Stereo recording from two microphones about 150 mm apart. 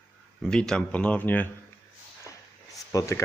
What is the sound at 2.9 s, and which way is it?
Speech, 20° left (ahead or behind).